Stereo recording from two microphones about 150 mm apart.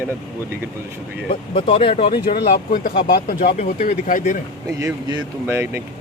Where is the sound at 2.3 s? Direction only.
65° left (ahead or behind).